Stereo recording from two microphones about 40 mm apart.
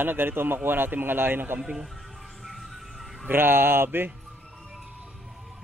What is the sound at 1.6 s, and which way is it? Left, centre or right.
Speech, centre.